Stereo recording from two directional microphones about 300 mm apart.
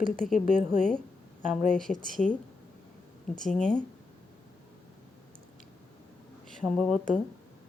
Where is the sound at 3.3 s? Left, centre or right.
Centre.